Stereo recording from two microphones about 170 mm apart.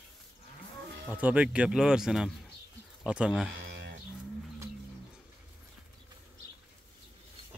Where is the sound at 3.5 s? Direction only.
90° right.